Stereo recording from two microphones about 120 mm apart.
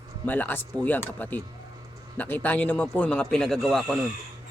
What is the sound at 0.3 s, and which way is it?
Speech, 15° left (ahead or behind).